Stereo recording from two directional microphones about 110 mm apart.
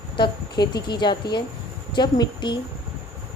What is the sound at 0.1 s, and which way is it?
A woman's voice, 45° left (ahead or behind).